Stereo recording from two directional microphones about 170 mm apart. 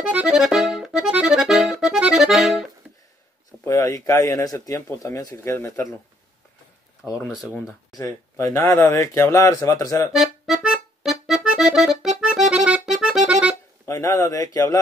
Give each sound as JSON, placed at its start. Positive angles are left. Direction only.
{"t": 0.1, "sound": "accordion", "side_deg": -5}
{"t": 3.6, "sound": "speech", "side_deg": 20}
{"t": 7.2, "sound": "speech", "side_deg": -5}
{"t": 8.0, "sound": "speech", "side_deg": 15}
{"t": 10.1, "sound": "accordion", "side_deg": 0}
{"t": 13.8, "sound": "speech", "side_deg": 20}